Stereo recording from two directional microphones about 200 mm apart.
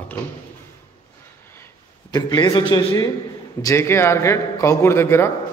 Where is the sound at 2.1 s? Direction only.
20° left (ahead or behind).